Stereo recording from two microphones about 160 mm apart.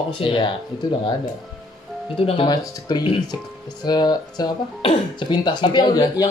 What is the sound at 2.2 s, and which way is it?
Speech, 35° left (ahead or behind).